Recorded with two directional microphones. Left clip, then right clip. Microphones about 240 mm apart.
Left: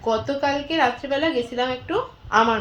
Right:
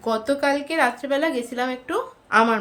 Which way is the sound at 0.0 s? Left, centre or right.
Centre.